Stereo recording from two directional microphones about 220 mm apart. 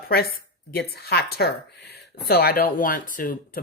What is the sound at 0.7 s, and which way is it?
Speech, 45° left (ahead or behind).